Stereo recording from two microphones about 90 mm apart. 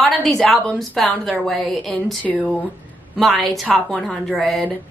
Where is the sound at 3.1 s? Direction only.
5° left (ahead or behind).